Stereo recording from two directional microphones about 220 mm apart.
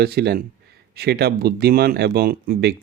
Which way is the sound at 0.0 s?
45° right (ahead or behind).